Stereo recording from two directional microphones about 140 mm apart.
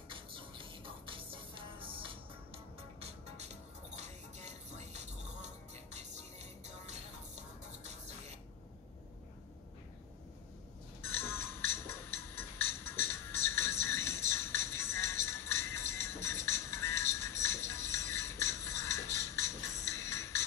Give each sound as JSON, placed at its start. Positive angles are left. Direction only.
{"t": 0.1, "sound": "music", "side_deg": -35}
{"t": 11.0, "sound": "music", "side_deg": 15}